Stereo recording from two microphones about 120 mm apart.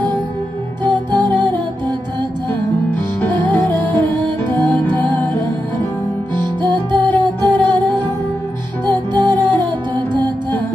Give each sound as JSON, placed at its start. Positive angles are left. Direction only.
{"t": 0.8, "sound": "music", "side_deg": -40}
{"t": 3.2, "sound": "music", "side_deg": 15}
{"t": 6.3, "sound": "music", "side_deg": -40}
{"t": 9.1, "sound": "music", "side_deg": -40}